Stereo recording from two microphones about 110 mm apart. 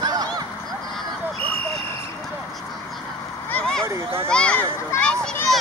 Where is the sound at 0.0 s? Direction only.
40° right (ahead or behind).